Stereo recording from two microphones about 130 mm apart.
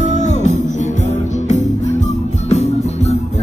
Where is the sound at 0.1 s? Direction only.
65° left (ahead or behind).